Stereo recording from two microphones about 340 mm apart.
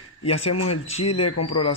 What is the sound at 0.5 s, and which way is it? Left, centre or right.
A man's voice, left.